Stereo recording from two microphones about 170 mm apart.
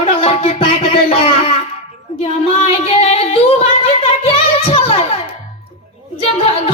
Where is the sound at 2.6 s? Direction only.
40° left (ahead or behind).